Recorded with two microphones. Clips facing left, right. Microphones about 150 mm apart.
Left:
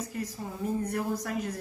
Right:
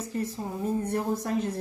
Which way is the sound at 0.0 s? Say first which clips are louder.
Right 4 dB; 30° right (ahead or behind).